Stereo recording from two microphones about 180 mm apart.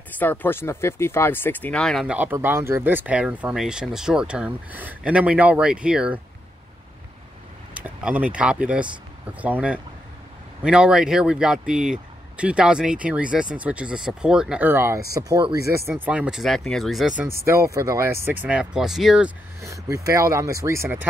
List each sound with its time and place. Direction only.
0.2 s speech: 10° left (ahead or behind)
2.1 s speech: 10° right (ahead or behind)
7.7 s speech: 10° right (ahead or behind)
17.2 s speech: 15° right (ahead or behind)
19.6 s speech: 15° right (ahead or behind)